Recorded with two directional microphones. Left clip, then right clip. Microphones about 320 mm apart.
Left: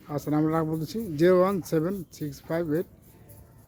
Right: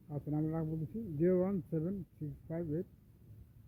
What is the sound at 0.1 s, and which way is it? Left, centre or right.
Speech, centre.